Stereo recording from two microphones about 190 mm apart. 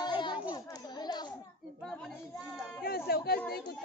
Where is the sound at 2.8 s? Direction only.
55° left (ahead or behind).